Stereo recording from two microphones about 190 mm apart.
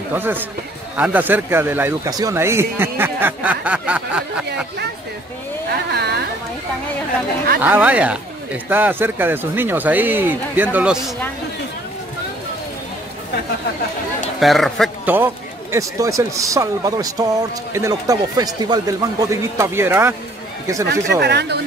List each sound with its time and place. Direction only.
0.1 s speech: 10° right (ahead or behind)
5.9 s a woman's voice: 60° right (ahead or behind)
7.6 s speech: 10° right (ahead or behind)
14.4 s speech: centre (ahead or behind)
15.0 s speech: 10° right (ahead or behind)
21.2 s a woman's voice: 60° right (ahead or behind)